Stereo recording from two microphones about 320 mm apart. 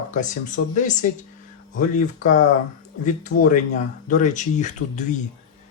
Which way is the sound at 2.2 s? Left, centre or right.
Left.